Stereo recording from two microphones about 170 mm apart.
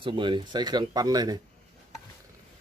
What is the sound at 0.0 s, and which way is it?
Speech, 30° right (ahead or behind).